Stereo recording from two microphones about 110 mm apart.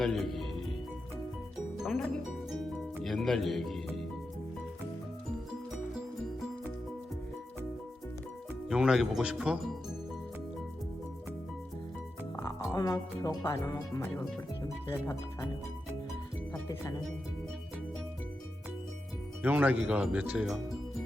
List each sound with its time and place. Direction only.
0.0 s speech: centre (ahead or behind)
1.8 s speech: centre (ahead or behind)
2.5 s music: centre (ahead or behind)
8.7 s speech: 5° right (ahead or behind)
12.4 s speech: 30° left (ahead or behind)
19.4 s speech: 15° right (ahead or behind)